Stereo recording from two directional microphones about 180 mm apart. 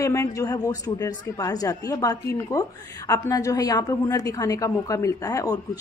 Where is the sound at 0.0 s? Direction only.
15° left (ahead or behind).